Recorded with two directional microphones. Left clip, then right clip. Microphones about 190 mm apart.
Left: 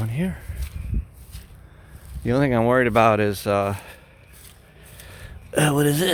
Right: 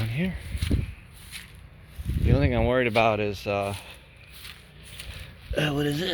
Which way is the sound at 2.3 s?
30° left (ahead or behind).